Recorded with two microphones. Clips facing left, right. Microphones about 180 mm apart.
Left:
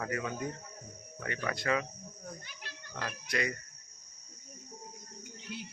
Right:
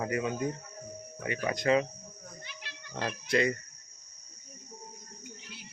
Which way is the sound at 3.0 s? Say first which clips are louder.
Right 7 dB; 30° right (ahead or behind).